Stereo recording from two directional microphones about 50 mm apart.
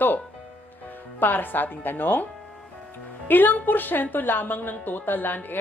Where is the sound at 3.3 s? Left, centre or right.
Left.